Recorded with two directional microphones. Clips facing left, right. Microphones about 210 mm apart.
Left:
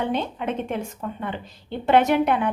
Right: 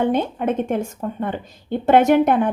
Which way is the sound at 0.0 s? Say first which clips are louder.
Right 6 dB; 50° right (ahead or behind).